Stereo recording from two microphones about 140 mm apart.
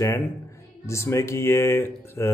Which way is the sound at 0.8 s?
20° left (ahead or behind).